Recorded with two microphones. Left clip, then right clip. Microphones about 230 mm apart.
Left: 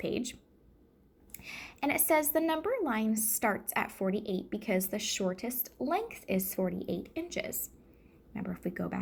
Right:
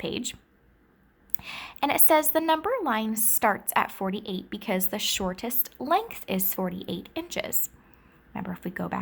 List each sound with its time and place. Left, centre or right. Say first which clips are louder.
0.0 s a woman's voice: right 3 dB; centre